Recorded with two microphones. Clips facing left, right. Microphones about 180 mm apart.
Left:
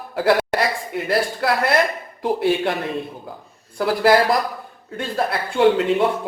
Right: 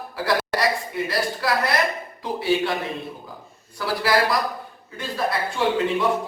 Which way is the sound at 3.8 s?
50° left (ahead or behind).